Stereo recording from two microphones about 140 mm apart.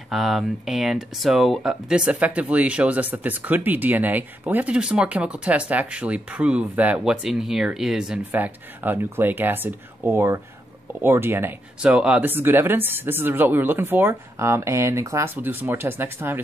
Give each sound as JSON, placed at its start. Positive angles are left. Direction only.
{"t": 0.1, "sound": "speech", "side_deg": 0}